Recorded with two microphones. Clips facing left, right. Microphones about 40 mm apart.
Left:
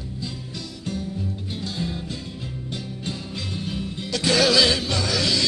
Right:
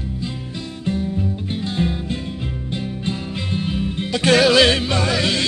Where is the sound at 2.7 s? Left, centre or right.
Right.